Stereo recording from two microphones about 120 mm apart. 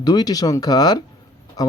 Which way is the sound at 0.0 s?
35° left (ahead or behind).